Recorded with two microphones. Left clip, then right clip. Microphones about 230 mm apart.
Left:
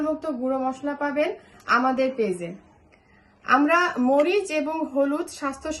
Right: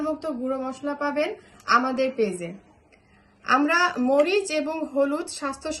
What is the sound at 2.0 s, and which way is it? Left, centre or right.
Speech, centre.